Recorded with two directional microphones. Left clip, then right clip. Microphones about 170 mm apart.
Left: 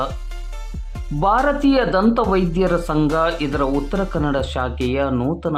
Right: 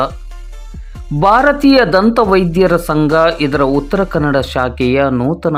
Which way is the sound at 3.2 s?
25° right (ahead or behind).